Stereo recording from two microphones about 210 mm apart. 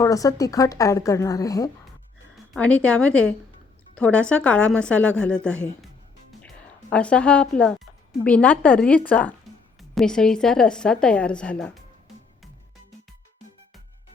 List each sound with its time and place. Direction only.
0.0 s speech: 15° left (ahead or behind)
2.3 s a woman's voice: 5° left (ahead or behind)